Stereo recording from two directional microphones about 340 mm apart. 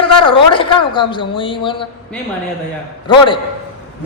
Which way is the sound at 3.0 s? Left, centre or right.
Centre.